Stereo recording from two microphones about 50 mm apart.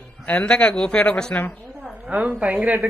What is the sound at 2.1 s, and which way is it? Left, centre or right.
Speech, right.